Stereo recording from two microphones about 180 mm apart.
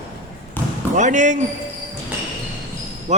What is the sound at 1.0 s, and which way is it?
Speech, 45° right (ahead or behind).